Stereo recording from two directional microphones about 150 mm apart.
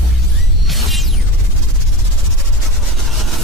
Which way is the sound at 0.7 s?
Centre (ahead or behind).